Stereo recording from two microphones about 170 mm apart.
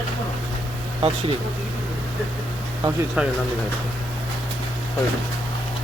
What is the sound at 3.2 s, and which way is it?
Speech, 5° right (ahead or behind).